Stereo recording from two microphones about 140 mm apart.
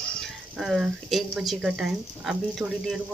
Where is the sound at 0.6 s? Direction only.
Centre (ahead or behind).